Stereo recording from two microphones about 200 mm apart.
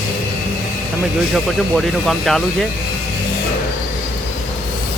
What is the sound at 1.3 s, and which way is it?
Speech, centre (ahead or behind).